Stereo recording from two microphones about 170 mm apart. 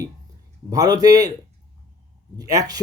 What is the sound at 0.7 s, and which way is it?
Speech, 20° right (ahead or behind).